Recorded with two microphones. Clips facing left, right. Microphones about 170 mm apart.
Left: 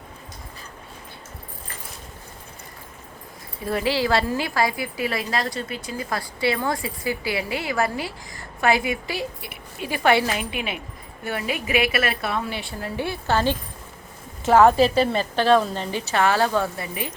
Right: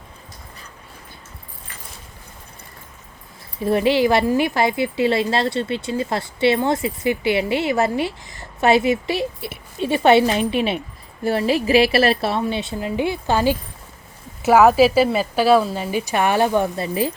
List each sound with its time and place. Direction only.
3.6 s a woman's voice: 25° right (ahead or behind)